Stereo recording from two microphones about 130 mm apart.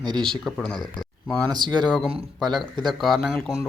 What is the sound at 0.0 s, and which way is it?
Speech, 35° right (ahead or behind).